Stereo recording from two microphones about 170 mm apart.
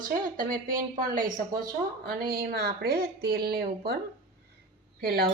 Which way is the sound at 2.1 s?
65° right (ahead or behind).